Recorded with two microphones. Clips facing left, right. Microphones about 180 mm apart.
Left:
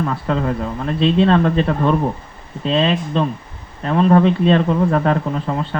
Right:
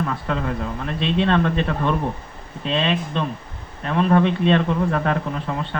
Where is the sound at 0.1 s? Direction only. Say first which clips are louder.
Left 5 dB; 35° left (ahead or behind).